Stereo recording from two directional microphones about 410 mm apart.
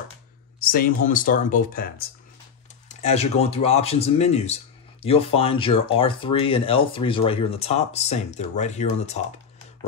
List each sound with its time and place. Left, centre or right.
0.6 s speech: left